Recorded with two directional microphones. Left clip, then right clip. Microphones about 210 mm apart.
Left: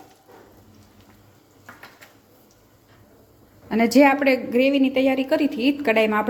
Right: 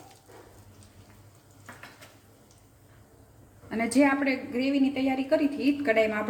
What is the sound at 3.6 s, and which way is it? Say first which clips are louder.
A woman's voice: left 8 dB; 50° left (ahead or behind).